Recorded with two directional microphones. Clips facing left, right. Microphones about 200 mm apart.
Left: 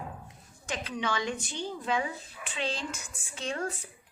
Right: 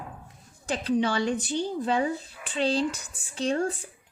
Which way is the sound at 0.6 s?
35° right (ahead or behind).